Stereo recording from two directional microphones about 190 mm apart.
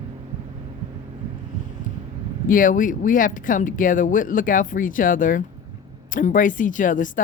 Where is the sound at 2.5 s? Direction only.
45° left (ahead or behind).